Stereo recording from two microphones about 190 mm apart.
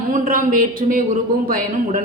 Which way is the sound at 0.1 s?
45° right (ahead or behind).